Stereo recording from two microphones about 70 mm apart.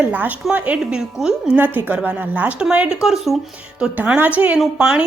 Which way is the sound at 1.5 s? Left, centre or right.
Right.